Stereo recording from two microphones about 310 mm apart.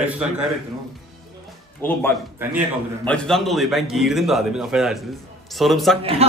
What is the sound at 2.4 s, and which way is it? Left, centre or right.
A man's voice, centre.